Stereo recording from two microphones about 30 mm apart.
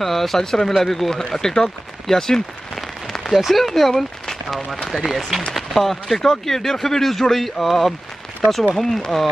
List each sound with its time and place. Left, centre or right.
0.0 s a man's voice: centre
1.1 s speech: centre
3.3 s a man's voice: centre